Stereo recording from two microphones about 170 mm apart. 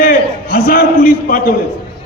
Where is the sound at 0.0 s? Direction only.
60° left (ahead or behind).